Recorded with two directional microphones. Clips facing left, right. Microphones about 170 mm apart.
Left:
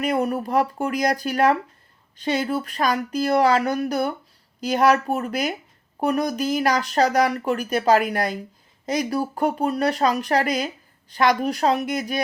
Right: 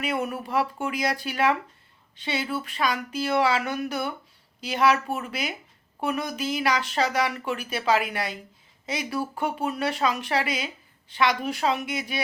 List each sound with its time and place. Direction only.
0.0 s speech: 40° left (ahead or behind)